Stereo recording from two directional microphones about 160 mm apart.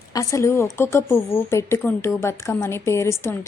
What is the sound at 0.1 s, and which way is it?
A woman's voice, 20° left (ahead or behind).